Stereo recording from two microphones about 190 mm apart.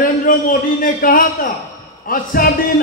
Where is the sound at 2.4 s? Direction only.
50° left (ahead or behind).